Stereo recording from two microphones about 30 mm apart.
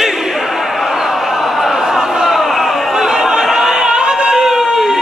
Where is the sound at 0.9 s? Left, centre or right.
Centre.